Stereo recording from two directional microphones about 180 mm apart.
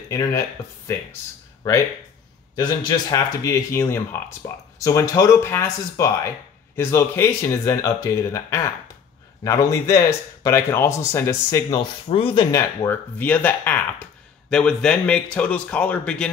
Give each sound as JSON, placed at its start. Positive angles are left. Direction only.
{"t": 2.5, "sound": "speech", "side_deg": 20}
{"t": 12.5, "sound": "a man's voice", "side_deg": 10}